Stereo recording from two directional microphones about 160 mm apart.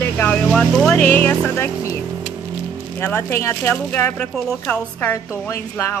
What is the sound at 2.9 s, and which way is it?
Speech, 15° left (ahead or behind).